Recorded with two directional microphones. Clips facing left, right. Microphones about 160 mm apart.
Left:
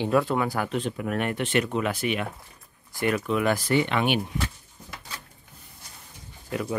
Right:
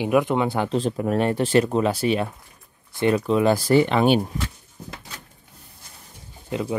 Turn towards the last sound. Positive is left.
turn(degrees=-20)  # may be behind; listen again after turning